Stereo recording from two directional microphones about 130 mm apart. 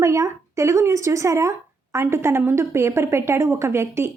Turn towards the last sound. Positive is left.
turn(degrees=-20)  # may be behind; listen again after turning